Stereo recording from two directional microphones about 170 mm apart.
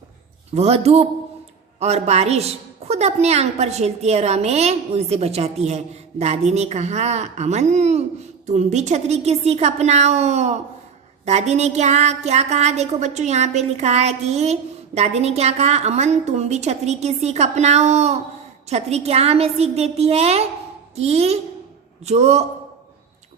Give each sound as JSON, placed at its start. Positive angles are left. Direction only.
{"t": 0.5, "sound": "a woman's voice", "side_deg": -40}